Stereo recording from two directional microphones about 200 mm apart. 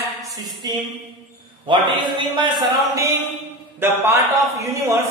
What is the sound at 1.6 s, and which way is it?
A man's voice, 25° right (ahead or behind).